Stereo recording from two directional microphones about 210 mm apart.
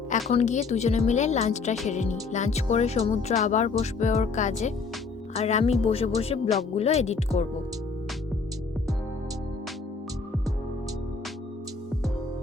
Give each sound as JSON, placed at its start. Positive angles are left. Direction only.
{"t": 0.3, "sound": "speech", "side_deg": 35}